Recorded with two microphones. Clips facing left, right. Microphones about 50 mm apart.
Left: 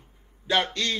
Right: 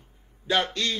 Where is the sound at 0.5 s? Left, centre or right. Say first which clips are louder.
Even; left.